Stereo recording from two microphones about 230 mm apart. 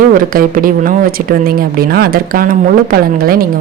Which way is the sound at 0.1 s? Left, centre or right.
Right.